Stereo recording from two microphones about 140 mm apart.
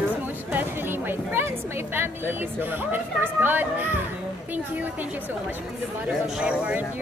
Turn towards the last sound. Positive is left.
turn(degrees=-10)  # may be behind; listen again after turning